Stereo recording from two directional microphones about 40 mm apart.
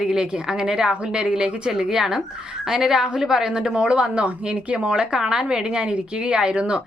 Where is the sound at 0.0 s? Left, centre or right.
Centre.